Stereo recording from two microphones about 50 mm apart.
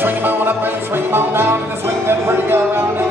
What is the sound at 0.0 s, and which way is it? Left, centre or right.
Music, right.